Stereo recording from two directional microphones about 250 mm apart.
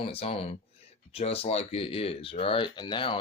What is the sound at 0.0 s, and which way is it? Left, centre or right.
Speech, left.